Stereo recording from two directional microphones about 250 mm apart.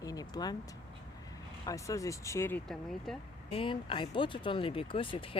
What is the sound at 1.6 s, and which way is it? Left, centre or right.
Speech, centre.